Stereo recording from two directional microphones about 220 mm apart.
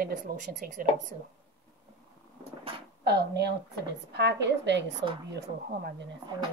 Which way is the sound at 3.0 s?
50° right (ahead or behind).